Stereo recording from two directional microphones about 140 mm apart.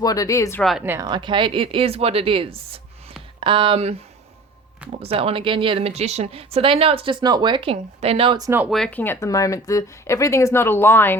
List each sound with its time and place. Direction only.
0.0 s speech: 25° left (ahead or behind)
0.6 s a woman's voice: centre (ahead or behind)
1.0 s a woman's voice: 35° right (ahead or behind)
8.4 s speech: 20° right (ahead or behind)
8.7 s speech: 10° left (ahead or behind)
9.2 s speech: 25° left (ahead or behind)